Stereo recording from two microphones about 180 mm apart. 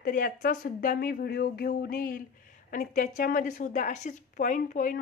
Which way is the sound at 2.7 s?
45° left (ahead or behind).